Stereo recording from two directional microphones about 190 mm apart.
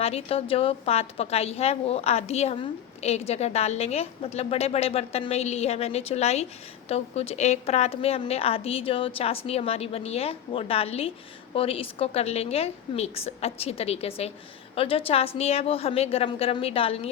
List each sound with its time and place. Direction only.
0.0 s a woman's voice: 30° left (ahead or behind)